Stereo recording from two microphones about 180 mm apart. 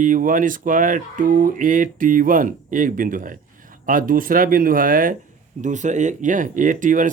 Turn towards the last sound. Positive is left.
turn(degrees=-45)  # may be behind; listen again after turning